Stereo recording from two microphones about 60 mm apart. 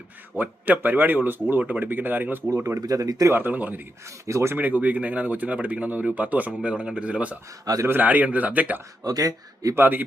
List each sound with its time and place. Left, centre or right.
0.4 s speech: right
2.6 s speech: right
3.3 s speech: right
4.3 s speech: right
4.5 s speech: right
7.6 s speech: right
7.9 s speech: right
9.0 s speech: right
9.7 s speech: right